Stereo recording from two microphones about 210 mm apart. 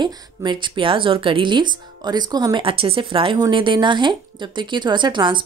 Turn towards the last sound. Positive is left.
turn(degrees=-20)  # may be behind; listen again after turning